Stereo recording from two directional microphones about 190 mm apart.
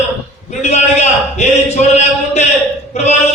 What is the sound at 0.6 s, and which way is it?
A man's voice, 35° left (ahead or behind).